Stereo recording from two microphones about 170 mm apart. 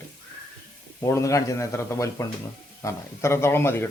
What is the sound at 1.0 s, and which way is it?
Speech, 15° left (ahead or behind).